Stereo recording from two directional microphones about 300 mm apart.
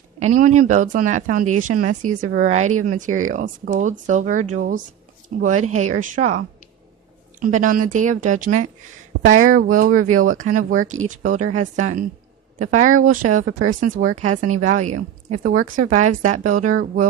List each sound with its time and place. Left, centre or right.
0.4 s speech: right
14.9 s a woman's voice: right
15.8 s speech: right